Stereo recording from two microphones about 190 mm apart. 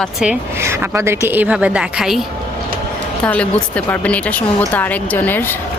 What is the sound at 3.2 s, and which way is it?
A woman's voice, 5° left (ahead or behind).